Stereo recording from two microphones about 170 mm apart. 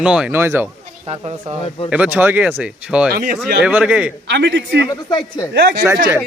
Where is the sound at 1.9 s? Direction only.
10° right (ahead or behind).